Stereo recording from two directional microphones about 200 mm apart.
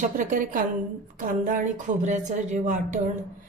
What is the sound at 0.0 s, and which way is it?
Speech, 40° right (ahead or behind).